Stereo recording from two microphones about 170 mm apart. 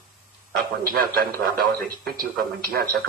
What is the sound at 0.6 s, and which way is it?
A man's voice, 60° right (ahead or behind).